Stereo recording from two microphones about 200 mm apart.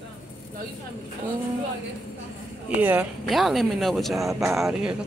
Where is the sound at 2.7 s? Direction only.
10° right (ahead or behind).